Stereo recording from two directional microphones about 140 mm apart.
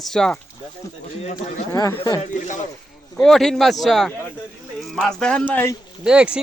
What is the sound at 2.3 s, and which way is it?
Speech, 65° left (ahead or behind).